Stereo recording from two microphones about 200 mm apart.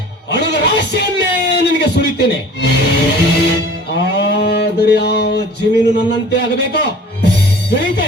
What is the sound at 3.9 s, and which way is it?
Livestock, 55° left (ahead or behind).